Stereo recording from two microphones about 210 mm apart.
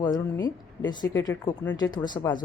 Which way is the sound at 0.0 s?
20° left (ahead or behind).